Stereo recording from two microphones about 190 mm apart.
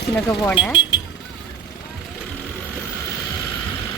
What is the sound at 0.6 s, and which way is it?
Speech, 25° left (ahead or behind).